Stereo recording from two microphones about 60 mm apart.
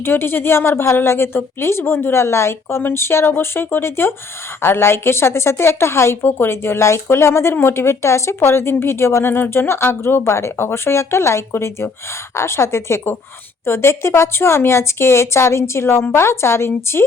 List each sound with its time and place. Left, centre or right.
0.0 s speech: left